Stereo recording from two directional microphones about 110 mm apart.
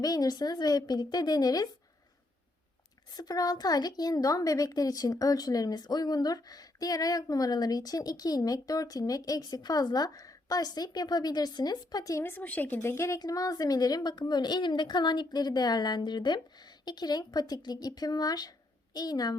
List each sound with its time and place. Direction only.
0.0 s a woman's voice: 35° left (ahead or behind)
3.2 s a woman's voice: 35° left (ahead or behind)
12.2 s a woman's voice: 15° left (ahead or behind); by 19.4 s 35° left (ahead or behind)